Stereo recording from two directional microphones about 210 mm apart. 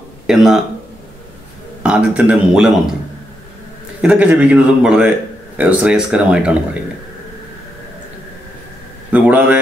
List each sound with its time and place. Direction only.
0.3 s speech: centre (ahead or behind)
1.8 s speech: 5° right (ahead or behind)
4.0 s speech: 5° right (ahead or behind)
9.1 s a man's voice: 5° right (ahead or behind)